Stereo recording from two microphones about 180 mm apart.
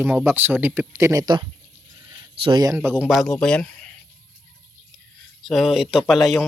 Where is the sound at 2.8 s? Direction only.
10° right (ahead or behind).